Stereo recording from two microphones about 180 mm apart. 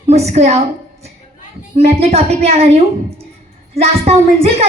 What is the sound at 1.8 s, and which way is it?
A woman's voice, 35° right (ahead or behind).